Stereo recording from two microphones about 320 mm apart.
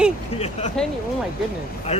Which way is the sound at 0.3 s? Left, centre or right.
Centre.